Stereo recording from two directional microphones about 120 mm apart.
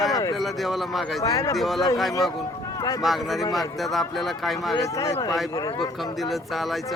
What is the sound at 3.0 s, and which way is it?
A man's voice, centre (ahead or behind).